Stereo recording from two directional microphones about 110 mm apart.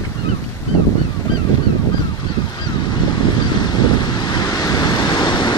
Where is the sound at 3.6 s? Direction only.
40° left (ahead or behind).